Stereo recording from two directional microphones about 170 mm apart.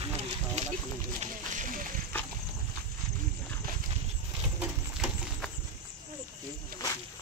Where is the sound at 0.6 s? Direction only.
40° right (ahead or behind).